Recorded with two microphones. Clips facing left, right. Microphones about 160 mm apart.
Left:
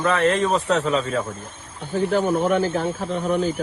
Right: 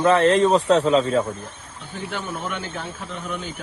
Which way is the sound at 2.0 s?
45° left (ahead or behind).